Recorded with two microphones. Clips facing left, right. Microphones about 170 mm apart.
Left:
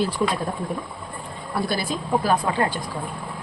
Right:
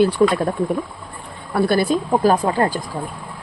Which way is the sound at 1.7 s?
55° right (ahead or behind).